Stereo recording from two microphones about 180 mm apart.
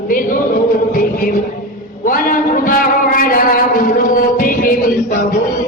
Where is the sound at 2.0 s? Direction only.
50° left (ahead or behind).